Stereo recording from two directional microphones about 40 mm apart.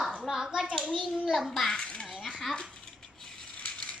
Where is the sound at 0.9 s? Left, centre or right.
Centre.